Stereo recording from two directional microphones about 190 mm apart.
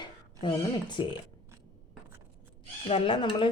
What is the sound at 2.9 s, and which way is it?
Speech, 30° left (ahead or behind).